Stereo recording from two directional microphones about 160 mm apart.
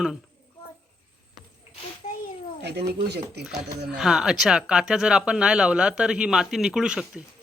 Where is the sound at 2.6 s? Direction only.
90° right.